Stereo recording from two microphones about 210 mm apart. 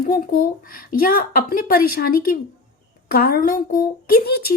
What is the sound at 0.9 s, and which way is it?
A woman's voice, 45° left (ahead or behind).